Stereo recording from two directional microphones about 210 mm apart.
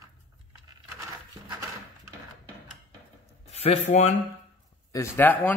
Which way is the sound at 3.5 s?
30° left (ahead or behind).